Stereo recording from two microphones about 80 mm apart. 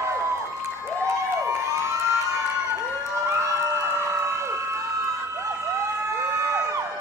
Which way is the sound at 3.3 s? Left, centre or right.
Right.